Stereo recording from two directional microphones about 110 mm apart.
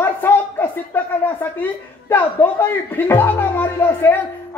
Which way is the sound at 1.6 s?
15° left (ahead or behind).